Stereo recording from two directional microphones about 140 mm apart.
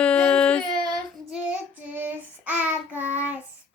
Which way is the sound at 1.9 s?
10° right (ahead or behind).